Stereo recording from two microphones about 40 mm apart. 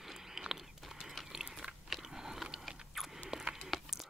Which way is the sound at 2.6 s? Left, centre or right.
Centre.